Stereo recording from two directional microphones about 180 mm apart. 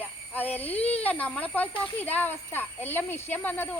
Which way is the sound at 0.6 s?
35° left (ahead or behind).